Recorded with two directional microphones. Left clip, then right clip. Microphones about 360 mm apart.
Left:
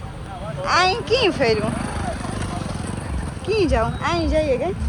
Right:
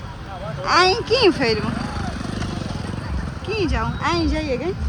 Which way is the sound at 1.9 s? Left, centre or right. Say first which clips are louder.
Left 1 dB; left.